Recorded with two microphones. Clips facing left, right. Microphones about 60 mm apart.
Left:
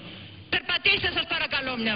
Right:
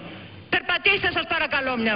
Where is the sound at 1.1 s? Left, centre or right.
Right.